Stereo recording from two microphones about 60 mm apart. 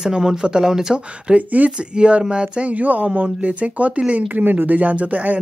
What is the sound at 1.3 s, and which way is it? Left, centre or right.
Speech, right.